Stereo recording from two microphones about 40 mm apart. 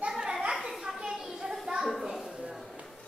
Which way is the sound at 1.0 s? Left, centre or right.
Centre.